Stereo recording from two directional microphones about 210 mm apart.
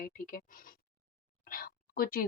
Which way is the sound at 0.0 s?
40° left (ahead or behind).